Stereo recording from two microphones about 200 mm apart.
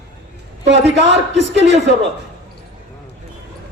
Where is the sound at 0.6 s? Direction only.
60° right (ahead or behind).